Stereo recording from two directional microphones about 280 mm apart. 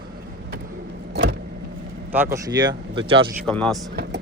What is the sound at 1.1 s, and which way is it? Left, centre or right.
Vehicle, right.